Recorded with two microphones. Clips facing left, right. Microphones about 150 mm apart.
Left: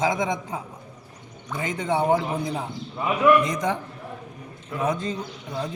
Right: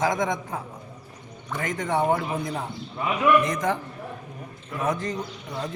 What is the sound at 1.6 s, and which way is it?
Speech, 20° left (ahead or behind).